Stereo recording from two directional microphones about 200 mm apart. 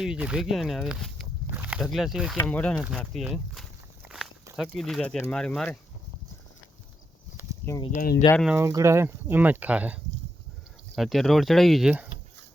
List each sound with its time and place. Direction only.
0.0 s speech: 5° right (ahead or behind)
2.7 s speech: 5° right (ahead or behind)
7.9 s speech: 45° left (ahead or behind)
8.5 s speech: 15° right (ahead or behind)